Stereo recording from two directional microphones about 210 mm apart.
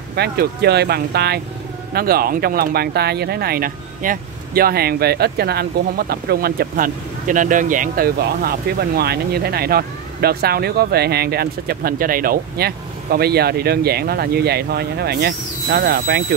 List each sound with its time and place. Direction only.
0.1 s speech: 50° right (ahead or behind)